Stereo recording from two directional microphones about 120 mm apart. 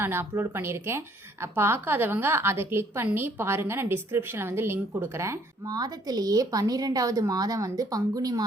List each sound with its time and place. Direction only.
0.0 s a woman's voice: 20° right (ahead or behind)